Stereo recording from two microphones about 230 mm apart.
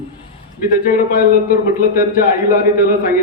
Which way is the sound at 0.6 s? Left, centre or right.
Left.